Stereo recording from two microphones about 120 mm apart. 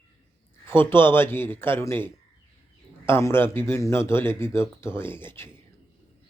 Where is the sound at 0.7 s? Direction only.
20° left (ahead or behind).